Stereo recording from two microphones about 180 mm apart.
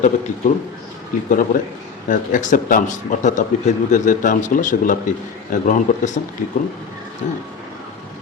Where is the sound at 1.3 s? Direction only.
45° left (ahead or behind).